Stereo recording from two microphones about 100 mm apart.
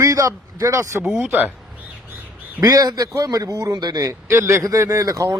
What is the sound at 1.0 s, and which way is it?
Speech, 5° right (ahead or behind).